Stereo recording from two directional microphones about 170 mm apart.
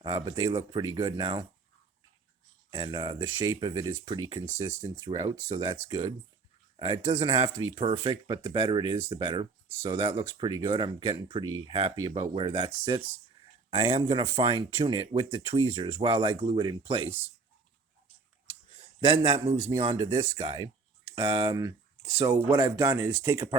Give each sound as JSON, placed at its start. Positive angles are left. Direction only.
{"t": 0.0, "sound": "speech", "side_deg": -30}
{"t": 2.6, "sound": "speech", "side_deg": -25}
{"t": 13.7, "sound": "speech", "side_deg": -35}
{"t": 18.9, "sound": "speech", "side_deg": -30}
{"t": 22.8, "sound": "speech", "side_deg": -15}